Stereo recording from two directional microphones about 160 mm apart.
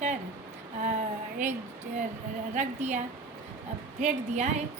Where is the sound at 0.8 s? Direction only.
55° right (ahead or behind).